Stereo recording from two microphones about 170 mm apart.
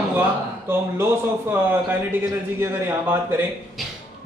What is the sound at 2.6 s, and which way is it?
Speech, 15° right (ahead or behind).